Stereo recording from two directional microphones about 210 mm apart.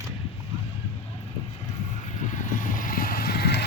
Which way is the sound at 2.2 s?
35° left (ahead or behind).